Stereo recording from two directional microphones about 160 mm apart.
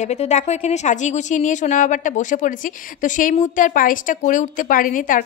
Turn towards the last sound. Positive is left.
turn(degrees=55)  # may be behind; listen again after turning